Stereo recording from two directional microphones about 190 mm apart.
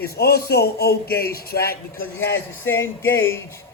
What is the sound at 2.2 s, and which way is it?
Speech, 10° left (ahead or behind).